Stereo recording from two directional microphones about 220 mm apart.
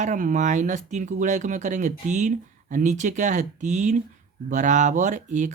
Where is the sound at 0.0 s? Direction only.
35° right (ahead or behind).